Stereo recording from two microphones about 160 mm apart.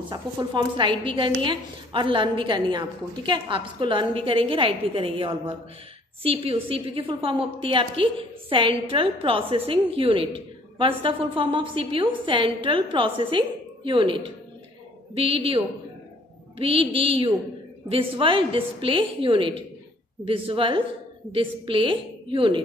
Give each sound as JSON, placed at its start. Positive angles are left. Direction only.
{"t": 0.1, "sound": "a woman's voice", "side_deg": -30}